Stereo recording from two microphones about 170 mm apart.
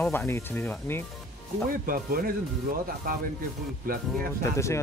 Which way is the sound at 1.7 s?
60° right (ahead or behind).